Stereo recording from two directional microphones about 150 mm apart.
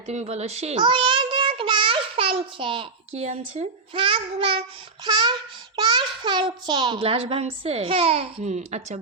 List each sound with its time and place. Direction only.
0.1 s a child's voice: 45° right (ahead or behind)
0.8 s child singing: 35° right (ahead or behind)
3.1 s a child's voice: 45° right (ahead or behind)